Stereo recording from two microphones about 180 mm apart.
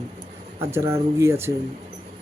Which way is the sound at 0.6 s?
15° right (ahead or behind).